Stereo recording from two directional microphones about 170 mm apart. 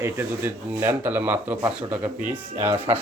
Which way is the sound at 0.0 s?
15° right (ahead or behind).